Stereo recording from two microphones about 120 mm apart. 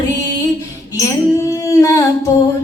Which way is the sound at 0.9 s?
25° left (ahead or behind).